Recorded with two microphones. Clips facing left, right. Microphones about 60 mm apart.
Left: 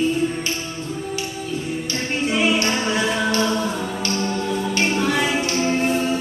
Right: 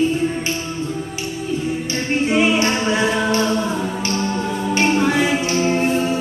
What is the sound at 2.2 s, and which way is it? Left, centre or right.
A capella, right.